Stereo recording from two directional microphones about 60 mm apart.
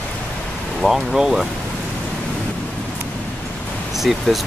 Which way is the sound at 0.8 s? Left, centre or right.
Centre.